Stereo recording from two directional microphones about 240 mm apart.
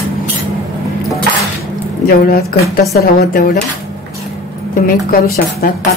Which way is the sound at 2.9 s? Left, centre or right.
Left.